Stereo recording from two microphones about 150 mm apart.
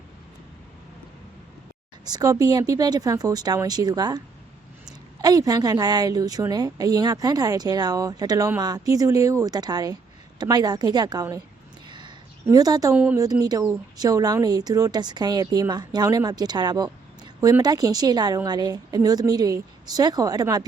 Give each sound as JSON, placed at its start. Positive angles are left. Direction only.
{"t": 2.0, "sound": "speech", "side_deg": -25}
{"t": 5.2, "sound": "speech", "side_deg": -25}
{"t": 11.9, "sound": "a sound", "side_deg": -30}
{"t": 13.4, "sound": "speech", "side_deg": -20}